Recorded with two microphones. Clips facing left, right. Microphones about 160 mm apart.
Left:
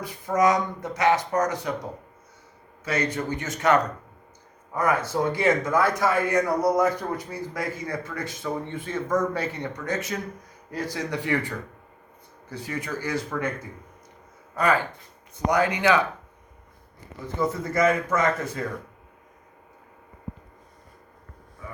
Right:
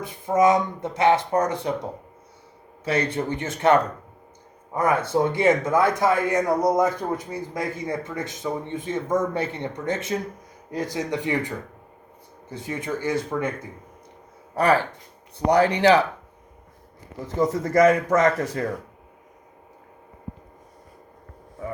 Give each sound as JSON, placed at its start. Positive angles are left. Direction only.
{"t": 0.0, "sound": "a man's voice", "side_deg": -25}
{"t": 2.8, "sound": "a man's voice", "side_deg": -30}
{"t": 14.5, "sound": "speech", "side_deg": -35}
{"t": 17.5, "sound": "speech", "side_deg": -40}